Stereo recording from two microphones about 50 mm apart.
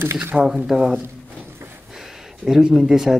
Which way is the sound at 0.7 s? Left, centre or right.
Centre.